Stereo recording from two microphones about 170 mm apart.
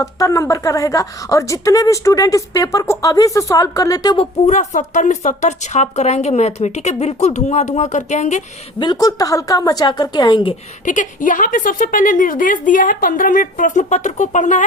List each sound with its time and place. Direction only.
0.0 s a woman's voice: 20° left (ahead or behind)
4.4 s a woman's voice: 45° left (ahead or behind)
8.8 s a woman's voice: 25° left (ahead or behind)
10.8 s a woman's voice: 50° left (ahead or behind)